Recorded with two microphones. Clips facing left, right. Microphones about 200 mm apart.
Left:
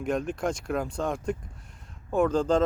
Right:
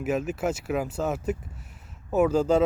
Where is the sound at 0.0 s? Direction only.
5° right (ahead or behind).